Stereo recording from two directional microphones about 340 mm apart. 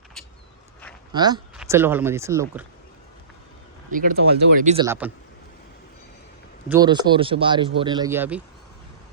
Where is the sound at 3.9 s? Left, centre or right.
Right.